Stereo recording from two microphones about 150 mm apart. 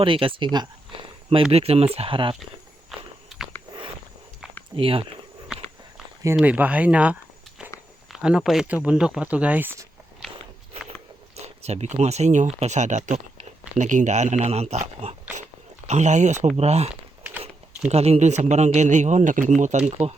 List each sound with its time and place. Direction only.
0.0 s speech: 35° right (ahead or behind)
2.9 s walk: centre (ahead or behind)
3.2 s a sound: 5° right (ahead or behind)
4.8 s speech: 35° right (ahead or behind)
6.3 s speech: 10° right (ahead or behind)
11.3 s speech: 45° right (ahead or behind)
16.9 s crumpling: 10° right (ahead or behind)
17.8 s speech: 45° right (ahead or behind)